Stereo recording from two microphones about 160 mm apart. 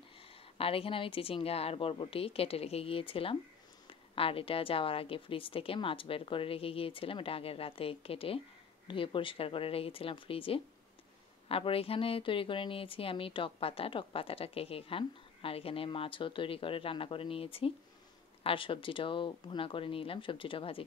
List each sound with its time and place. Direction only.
0.6 s speech: 35° left (ahead or behind)